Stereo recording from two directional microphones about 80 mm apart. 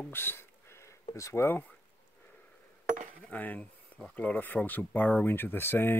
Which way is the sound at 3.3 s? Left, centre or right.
Centre.